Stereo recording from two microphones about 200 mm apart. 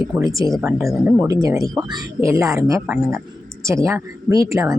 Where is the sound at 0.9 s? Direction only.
5° right (ahead or behind).